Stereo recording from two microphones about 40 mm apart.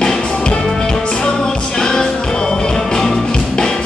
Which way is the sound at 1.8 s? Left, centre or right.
Centre.